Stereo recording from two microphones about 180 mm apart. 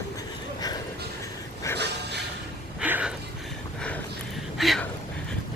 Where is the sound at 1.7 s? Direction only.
70° right (ahead or behind).